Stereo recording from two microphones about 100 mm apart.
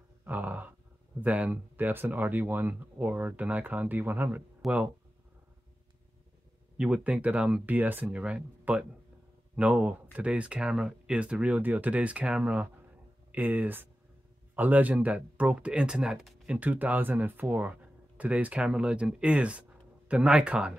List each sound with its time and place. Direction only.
0.2 s a sound: 15° right (ahead or behind)
1.2 s speech: 15° right (ahead or behind)
6.8 s speech: 10° right (ahead or behind)